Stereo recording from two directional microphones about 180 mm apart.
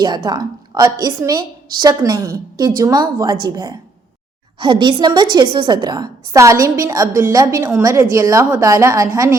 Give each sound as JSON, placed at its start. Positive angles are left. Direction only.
{"t": 0.0, "sound": "a woman's voice", "side_deg": -25}